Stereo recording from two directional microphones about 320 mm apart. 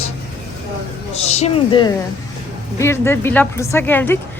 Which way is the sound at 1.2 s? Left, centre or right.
Centre.